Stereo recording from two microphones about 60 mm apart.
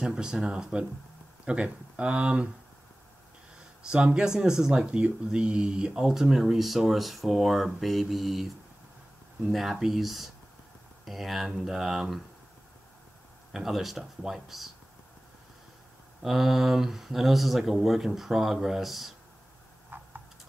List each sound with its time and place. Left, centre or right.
0.0 s speech: centre
3.9 s speech: centre
13.5 s speech: centre
16.2 s speech: centre